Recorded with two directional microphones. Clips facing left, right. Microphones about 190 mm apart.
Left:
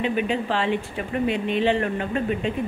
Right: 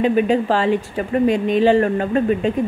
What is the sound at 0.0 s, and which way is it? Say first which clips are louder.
Speech: right 8 dB; 40° right (ahead or behind).